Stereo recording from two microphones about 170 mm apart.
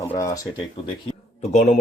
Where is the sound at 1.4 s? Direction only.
40° left (ahead or behind).